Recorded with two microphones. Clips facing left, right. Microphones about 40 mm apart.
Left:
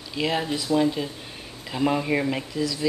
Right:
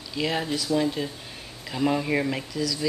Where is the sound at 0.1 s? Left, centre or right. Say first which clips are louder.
Left 1 dB; centre.